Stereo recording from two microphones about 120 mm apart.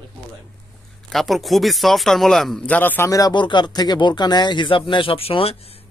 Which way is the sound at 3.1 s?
35° left (ahead or behind).